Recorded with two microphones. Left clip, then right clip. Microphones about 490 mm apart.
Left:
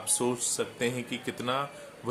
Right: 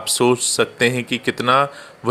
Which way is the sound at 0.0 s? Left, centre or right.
Left.